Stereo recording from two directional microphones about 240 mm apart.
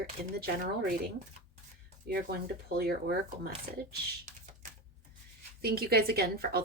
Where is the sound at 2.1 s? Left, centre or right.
Right.